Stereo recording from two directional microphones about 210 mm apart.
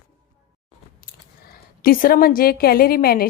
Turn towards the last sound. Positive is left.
turn(degrees=45)  # may be behind; listen again after turning